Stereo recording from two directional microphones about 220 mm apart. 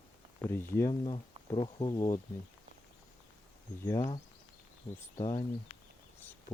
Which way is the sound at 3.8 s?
10° left (ahead or behind).